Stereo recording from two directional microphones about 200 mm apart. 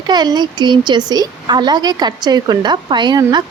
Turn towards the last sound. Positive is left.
turn(degrees=-20)  # may be behind; listen again after turning